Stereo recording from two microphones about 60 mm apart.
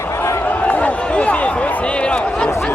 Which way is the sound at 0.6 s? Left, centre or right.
Left.